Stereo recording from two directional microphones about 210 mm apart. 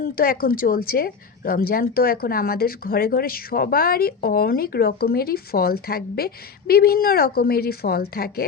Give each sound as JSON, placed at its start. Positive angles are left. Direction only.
{"t": 0.0, "sound": "a woman's voice", "side_deg": 45}